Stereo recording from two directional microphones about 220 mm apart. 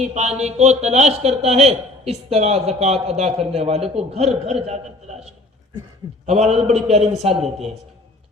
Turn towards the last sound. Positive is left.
turn(degrees=-30)  # may be behind; listen again after turning